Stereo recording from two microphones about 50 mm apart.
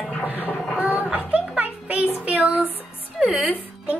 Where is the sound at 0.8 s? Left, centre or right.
Right.